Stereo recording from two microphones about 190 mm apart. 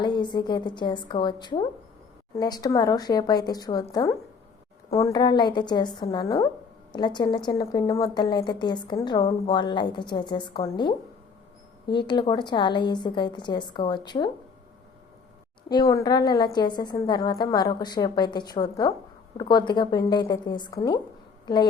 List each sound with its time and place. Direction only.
0.0 s speech: 25° left (ahead or behind)
15.7 s a woman's voice: 15° left (ahead or behind)